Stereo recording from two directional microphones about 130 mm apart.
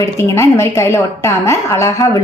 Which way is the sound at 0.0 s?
20° left (ahead or behind).